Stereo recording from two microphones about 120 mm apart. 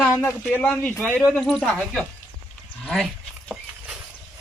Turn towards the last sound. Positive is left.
turn(degrees=5)  # may be behind; listen again after turning